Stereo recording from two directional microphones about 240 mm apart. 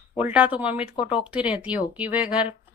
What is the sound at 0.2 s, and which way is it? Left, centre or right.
A woman's voice, centre.